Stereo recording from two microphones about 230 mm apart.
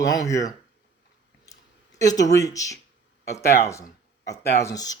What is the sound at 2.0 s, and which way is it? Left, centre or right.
A man's voice, centre.